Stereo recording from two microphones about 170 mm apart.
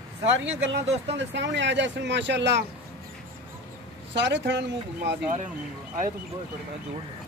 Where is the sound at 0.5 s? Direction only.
90° right.